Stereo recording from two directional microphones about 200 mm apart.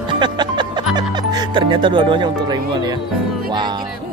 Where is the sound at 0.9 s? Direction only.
20° right (ahead or behind).